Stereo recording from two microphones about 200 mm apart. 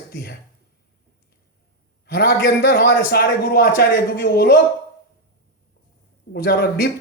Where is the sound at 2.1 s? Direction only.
55° left (ahead or behind).